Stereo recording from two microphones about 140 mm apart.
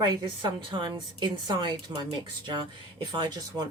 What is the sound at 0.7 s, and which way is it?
A woman's voice, 35° right (ahead or behind).